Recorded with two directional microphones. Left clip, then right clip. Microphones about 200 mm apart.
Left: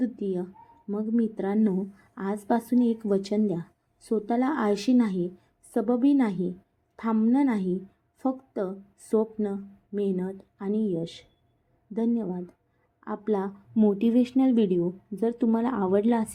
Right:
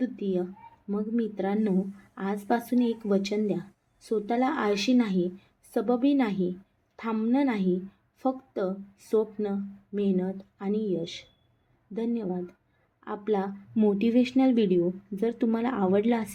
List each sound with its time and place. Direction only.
0.0 s speech: 15° left (ahead or behind)
13.7 s speech: 5° left (ahead or behind)